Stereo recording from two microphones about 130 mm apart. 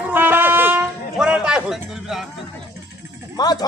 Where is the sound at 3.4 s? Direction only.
30° left (ahead or behind).